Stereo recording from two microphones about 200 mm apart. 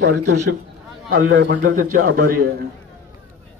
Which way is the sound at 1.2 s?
70° right (ahead or behind).